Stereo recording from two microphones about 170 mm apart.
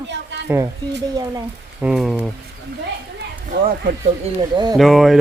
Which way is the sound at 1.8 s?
5° right (ahead or behind).